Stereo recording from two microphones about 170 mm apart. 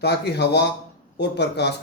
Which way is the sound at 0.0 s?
75° left (ahead or behind).